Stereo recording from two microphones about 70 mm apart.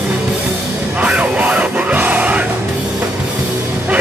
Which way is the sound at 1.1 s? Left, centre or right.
Centre.